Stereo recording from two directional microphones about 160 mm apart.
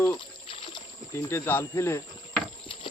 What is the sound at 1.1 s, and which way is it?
Speech, 15° left (ahead or behind).